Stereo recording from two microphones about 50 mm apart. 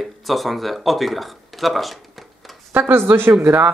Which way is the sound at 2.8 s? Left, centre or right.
Right.